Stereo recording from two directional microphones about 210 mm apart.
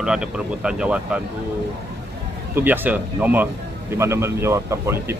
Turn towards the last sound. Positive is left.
turn(degrees=-15)  # may be behind; listen again after turning